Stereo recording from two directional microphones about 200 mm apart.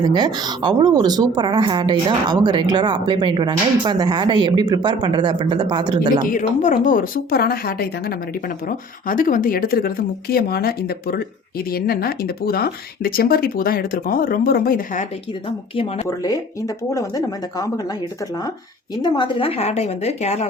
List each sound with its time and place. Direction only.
0.0 s speech: 20° right (ahead or behind)
6.3 s speech: 40° left (ahead or behind)
9.0 s speech: 45° left (ahead or behind)
15.4 s speech: 25° left (ahead or behind)
19.0 s a woman's voice: 25° left (ahead or behind)